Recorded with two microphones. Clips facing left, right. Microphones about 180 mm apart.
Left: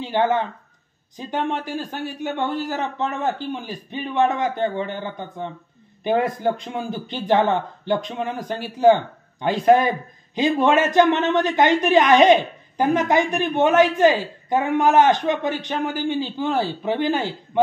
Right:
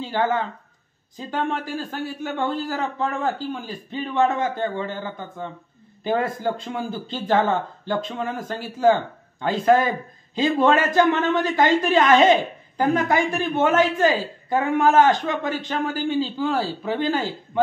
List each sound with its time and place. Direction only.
0.0 s speech: 20° left (ahead or behind)